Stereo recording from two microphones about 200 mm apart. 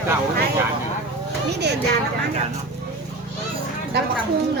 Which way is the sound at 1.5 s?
55° right (ahead or behind).